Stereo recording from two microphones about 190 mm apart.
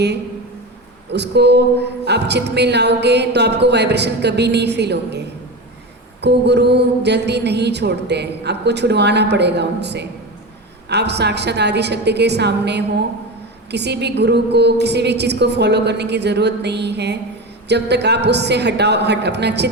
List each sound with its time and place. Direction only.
1.1 s speech: 60° right (ahead or behind)
6.2 s speech: 60° right (ahead or behind)